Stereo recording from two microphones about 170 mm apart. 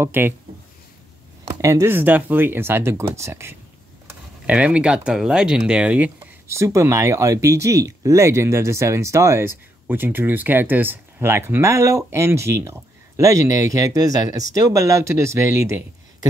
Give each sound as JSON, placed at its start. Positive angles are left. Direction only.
{"t": 0.0, "sound": "speech", "side_deg": -15}
{"t": 1.6, "sound": "speech", "side_deg": -15}